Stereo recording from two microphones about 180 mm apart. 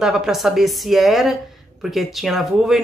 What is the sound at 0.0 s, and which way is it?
A woman's voice, 5° right (ahead or behind).